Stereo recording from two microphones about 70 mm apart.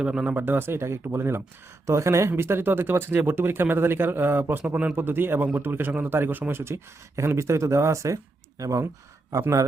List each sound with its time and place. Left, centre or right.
0.0 s speech: centre
0.3 s a man's voice: right